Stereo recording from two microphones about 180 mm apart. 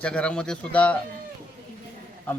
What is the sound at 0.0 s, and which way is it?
Speech, 5° left (ahead or behind).